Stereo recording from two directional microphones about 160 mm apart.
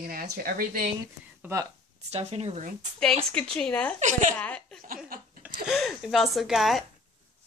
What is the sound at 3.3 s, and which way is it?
Speech, 5° left (ahead or behind).